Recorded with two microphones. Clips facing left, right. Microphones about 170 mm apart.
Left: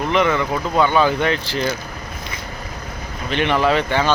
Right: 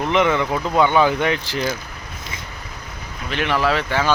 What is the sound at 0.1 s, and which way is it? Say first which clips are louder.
Speech: even; 20° right (ahead or behind).